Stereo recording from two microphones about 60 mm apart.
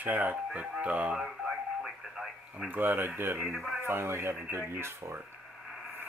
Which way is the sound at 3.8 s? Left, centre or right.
Right.